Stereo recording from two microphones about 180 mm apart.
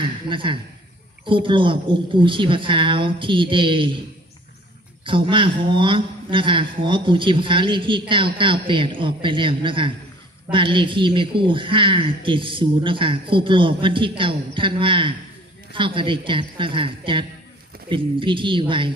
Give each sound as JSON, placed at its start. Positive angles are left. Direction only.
{"t": 0.3, "sound": "speech", "side_deg": -25}
{"t": 5.0, "sound": "speech", "side_deg": -30}